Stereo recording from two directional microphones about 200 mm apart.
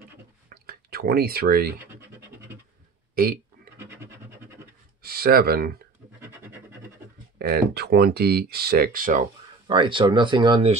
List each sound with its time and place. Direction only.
0.5 s drip: 50° right (ahead or behind)
1.8 s scratch: 10° right (ahead or behind)
3.2 s speech: 50° right (ahead or behind)
4.0 s a sound: 10° right (ahead or behind)
5.0 s speech: 50° right (ahead or behind)
7.3 s speech: 50° right (ahead or behind)
9.7 s speech: 25° right (ahead or behind)